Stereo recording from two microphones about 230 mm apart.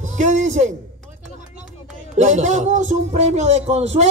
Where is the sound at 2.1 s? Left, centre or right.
Right.